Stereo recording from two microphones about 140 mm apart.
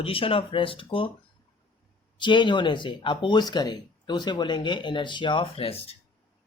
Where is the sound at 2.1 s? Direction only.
35° left (ahead or behind).